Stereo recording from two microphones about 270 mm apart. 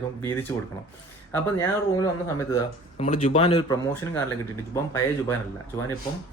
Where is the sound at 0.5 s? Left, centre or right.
Centre.